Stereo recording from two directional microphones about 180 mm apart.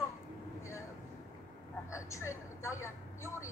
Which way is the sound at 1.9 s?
15° left (ahead or behind).